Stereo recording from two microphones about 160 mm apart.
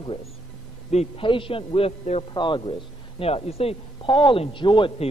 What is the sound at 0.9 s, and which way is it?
Speech, 35° left (ahead or behind).